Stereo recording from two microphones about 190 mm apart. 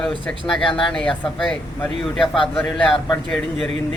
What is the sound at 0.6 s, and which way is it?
Speech, 25° left (ahead or behind).